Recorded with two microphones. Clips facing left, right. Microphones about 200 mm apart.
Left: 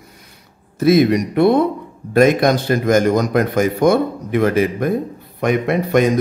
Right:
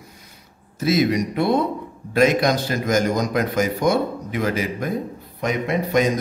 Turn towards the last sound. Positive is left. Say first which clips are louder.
# left 4 dB
turn(degrees=60)  # may be behind; listen again after turning